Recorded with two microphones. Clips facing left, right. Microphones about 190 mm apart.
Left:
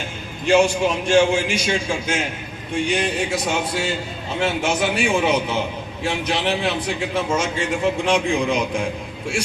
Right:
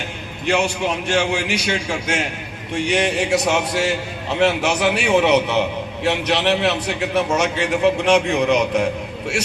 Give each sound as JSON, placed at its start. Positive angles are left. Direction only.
{"t": 0.4, "sound": "a man's voice", "side_deg": -65}